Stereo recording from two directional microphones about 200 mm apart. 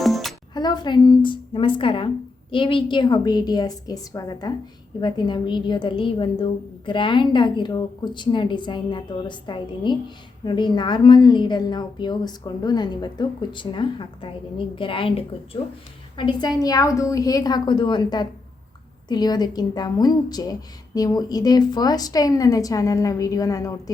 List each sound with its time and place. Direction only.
0.0 s music: centre (ahead or behind)
0.5 s a woman's voice: 20° left (ahead or behind)